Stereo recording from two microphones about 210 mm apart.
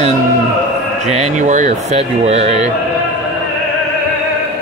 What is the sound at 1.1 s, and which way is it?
Speech, 35° right (ahead or behind).